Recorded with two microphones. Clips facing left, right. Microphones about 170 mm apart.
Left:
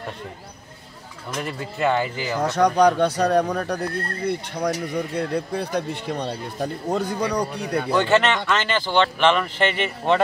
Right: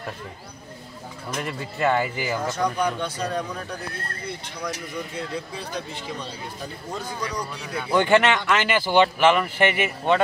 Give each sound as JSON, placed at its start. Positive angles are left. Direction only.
{"t": 1.3, "sound": "speech", "side_deg": 0}
{"t": 2.4, "sound": "speech", "side_deg": 70}
{"t": 7.9, "sound": "speech", "side_deg": -15}